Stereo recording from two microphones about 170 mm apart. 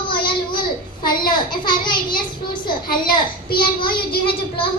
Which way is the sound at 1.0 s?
55° left (ahead or behind).